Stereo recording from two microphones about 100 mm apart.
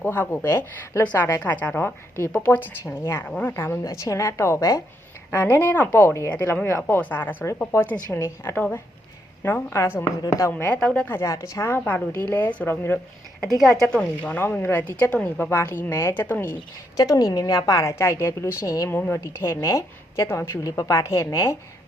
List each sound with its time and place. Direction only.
0.0 s a woman's voice: 20° left (ahead or behind)
5.3 s a woman's voice: 20° left (ahead or behind)
10.5 s speech: 15° left (ahead or behind)
11.1 s a woman's voice: 25° left (ahead or behind)
11.9 s speech: 15° left (ahead or behind)
13.6 s a woman's voice: centre (ahead or behind); by 16.6 s 20° left (ahead or behind)
17.0 s a woman's voice: 35° left (ahead or behind)